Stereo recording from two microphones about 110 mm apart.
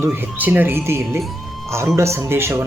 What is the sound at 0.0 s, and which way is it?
Speech, 20° right (ahead or behind).